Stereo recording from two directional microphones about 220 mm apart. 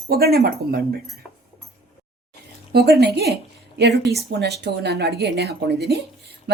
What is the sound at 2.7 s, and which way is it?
Speech, 45° right (ahead or behind).